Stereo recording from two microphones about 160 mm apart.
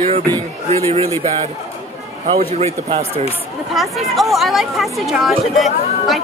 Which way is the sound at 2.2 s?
45° right (ahead or behind).